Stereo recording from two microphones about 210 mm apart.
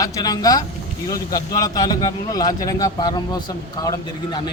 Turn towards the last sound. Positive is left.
turn(degrees=20)  # may be behind; listen again after turning